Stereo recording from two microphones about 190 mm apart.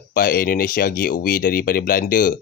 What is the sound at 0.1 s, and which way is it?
Speech, 50° left (ahead or behind).